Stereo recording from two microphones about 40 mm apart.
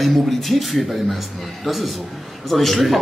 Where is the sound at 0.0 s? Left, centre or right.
Centre.